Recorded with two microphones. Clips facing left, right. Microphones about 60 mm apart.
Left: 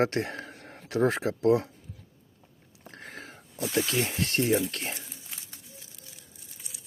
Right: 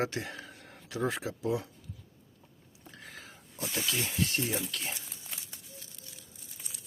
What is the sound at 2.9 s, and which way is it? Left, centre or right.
Snake, left.